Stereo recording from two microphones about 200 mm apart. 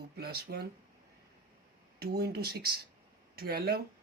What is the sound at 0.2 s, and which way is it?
Speech, 55° right (ahead or behind).